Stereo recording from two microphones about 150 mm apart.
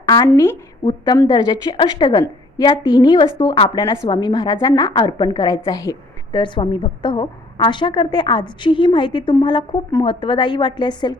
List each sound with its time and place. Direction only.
0.0 s a woman's voice: 25° left (ahead or behind)